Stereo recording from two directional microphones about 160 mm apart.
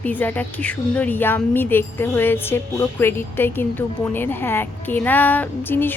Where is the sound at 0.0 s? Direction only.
10° left (ahead or behind).